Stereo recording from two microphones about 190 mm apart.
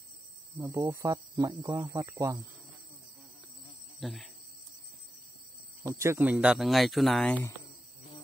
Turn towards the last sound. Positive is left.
turn(degrees=5)  # may be behind; listen again after turning